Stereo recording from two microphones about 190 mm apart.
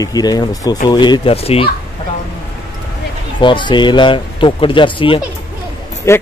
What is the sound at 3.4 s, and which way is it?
Speech, 25° left (ahead or behind).